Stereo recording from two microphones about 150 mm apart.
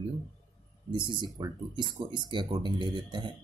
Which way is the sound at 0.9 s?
30° right (ahead or behind).